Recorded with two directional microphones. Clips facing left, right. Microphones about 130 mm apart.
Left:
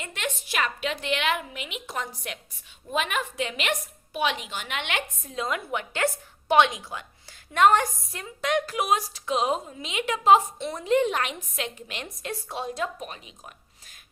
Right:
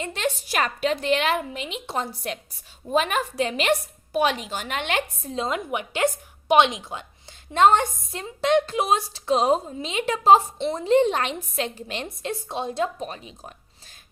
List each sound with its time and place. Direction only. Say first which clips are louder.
0.0 s a woman's voice: right 6 dB; 30° right (ahead or behind)